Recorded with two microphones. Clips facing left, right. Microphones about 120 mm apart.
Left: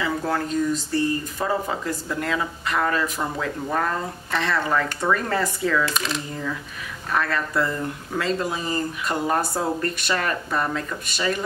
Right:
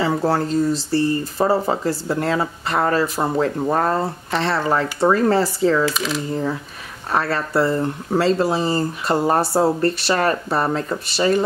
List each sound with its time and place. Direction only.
0.0 s speech: 35° right (ahead or behind)
5.9 s speech: centre (ahead or behind)
7.1 s speech: 30° right (ahead or behind)